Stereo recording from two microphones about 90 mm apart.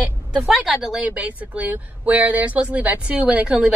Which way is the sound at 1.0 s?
15° right (ahead or behind).